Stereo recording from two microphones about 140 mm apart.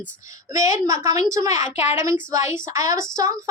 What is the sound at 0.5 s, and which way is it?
A woman's voice, 20° right (ahead or behind).